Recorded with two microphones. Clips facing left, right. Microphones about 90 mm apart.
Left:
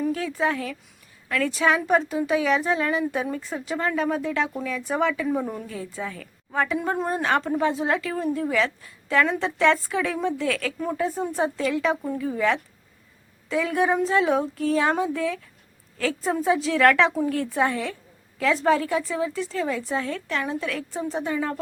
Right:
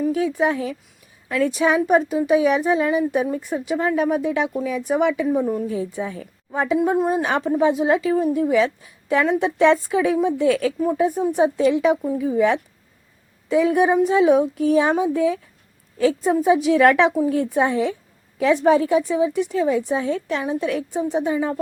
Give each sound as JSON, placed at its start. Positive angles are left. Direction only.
{"t": 0.0, "sound": "a woman's voice", "side_deg": -10}
{"t": 5.3, "sound": "a woman's voice", "side_deg": -5}
{"t": 5.6, "sound": "a woman's voice", "side_deg": -20}
{"t": 6.7, "sound": "a woman's voice", "side_deg": -5}